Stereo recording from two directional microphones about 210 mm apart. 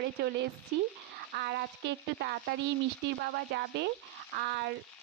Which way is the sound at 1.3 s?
50° right (ahead or behind).